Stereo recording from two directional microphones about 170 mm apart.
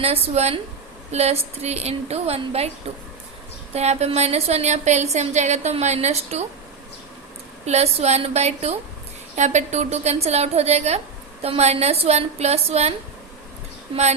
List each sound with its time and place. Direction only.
0.0 s a woman's voice: 35° right (ahead or behind)
3.8 s a woman's voice: 40° right (ahead or behind)
7.6 s a woman's voice: 40° right (ahead or behind)